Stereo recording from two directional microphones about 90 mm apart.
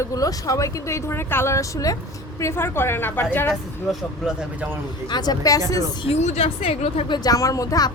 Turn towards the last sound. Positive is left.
turn(degrees=45)  # may be behind; listen again after turning